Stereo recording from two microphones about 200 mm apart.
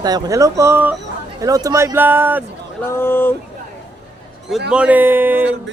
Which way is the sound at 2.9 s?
10° left (ahead or behind).